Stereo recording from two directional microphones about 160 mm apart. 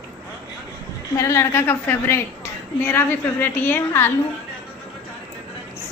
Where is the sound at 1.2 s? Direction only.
15° left (ahead or behind).